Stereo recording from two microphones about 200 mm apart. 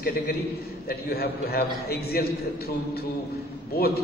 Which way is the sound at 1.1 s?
50° left (ahead or behind).